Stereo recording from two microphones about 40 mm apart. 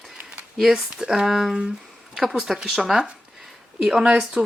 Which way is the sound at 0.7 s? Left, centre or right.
Centre.